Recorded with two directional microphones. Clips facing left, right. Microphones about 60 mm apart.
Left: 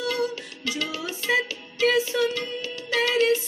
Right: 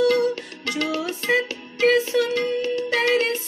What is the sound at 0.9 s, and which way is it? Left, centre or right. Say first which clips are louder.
Music: right 2 dB; right.